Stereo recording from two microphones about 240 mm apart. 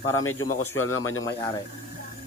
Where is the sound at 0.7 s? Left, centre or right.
Centre.